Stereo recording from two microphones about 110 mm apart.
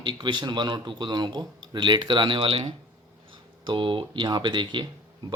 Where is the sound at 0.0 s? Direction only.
45° right (ahead or behind).